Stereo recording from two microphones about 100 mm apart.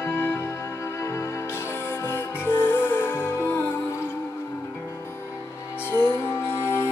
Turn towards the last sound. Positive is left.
turn(degrees=25)  # may be behind; listen again after turning